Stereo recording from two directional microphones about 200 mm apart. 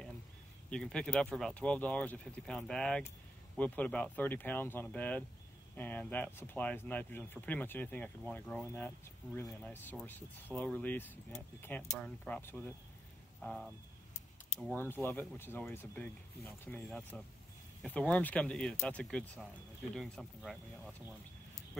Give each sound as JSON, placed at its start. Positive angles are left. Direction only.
{"t": 0.7, "sound": "speech", "side_deg": 5}
{"t": 14.7, "sound": "speech", "side_deg": 10}